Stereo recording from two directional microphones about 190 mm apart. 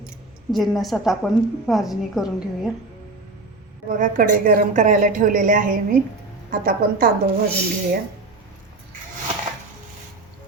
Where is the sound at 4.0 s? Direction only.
45° right (ahead or behind).